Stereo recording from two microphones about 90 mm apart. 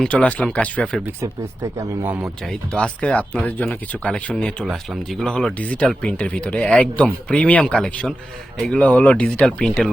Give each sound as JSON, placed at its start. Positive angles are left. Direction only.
{"t": 0.0, "sound": "speech", "side_deg": 15}
{"t": 1.2, "sound": "speech", "side_deg": -35}
{"t": 2.2, "sound": "speech", "side_deg": 10}
{"t": 4.6, "sound": "speech", "side_deg": 0}